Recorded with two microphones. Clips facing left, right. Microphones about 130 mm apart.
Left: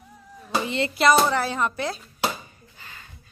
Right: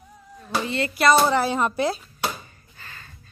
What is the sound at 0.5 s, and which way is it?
Speech, 20° left (ahead or behind).